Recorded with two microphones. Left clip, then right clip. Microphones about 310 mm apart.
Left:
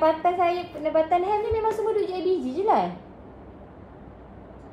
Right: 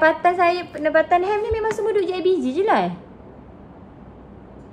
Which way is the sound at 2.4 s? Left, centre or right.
Right.